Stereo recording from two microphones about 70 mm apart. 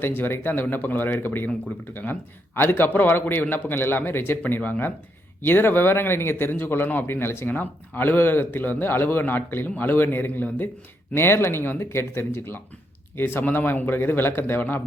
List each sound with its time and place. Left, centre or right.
0.2 s speech: left